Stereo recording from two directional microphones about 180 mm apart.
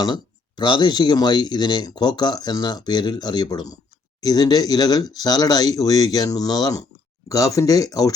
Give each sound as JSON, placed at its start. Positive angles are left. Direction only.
{"t": 0.0, "sound": "speech", "side_deg": 25}